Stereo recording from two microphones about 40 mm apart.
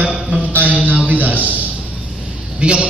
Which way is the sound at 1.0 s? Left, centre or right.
Right.